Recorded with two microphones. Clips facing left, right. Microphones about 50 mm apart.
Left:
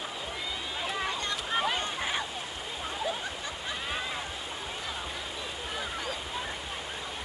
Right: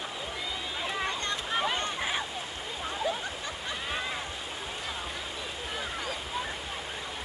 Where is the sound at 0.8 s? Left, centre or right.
Centre.